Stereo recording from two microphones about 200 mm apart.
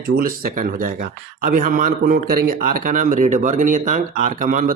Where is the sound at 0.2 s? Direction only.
45° right (ahead or behind).